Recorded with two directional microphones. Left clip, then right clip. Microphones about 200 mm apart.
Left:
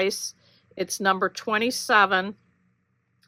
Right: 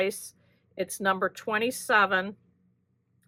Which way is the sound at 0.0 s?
40° left (ahead or behind).